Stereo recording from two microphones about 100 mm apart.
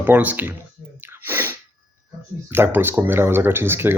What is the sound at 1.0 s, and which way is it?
Sneeze, 20° right (ahead or behind).